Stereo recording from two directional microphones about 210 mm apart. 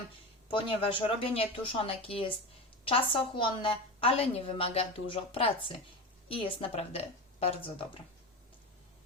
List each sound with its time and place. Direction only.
0.5 s a woman's voice: 25° left (ahead or behind)